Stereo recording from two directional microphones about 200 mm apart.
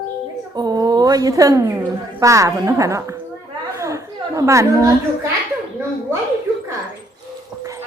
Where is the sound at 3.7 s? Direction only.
15° right (ahead or behind).